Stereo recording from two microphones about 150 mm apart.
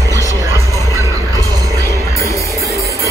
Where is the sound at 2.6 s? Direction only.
20° right (ahead or behind).